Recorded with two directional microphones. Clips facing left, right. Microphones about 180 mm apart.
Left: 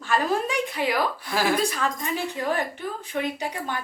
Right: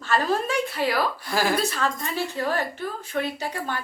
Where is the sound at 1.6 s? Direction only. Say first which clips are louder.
Even; 15° left (ahead or behind).